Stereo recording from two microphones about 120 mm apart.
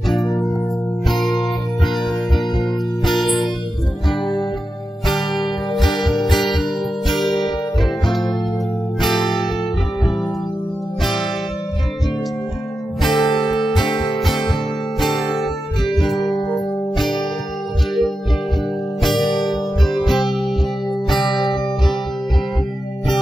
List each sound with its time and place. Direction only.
1.0 s music: centre (ahead or behind)
5.0 s music: centre (ahead or behind)
7.2 s music: 40° left (ahead or behind)
8.1 s music: centre (ahead or behind)
13.1 s music: 40° left (ahead or behind)
15.0 s music: centre (ahead or behind)
16.3 s music: 35° left (ahead or behind)
19.4 s music: centre (ahead or behind)